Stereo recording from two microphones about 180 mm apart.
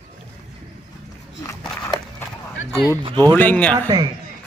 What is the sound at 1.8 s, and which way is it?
Walk, 15° left (ahead or behind).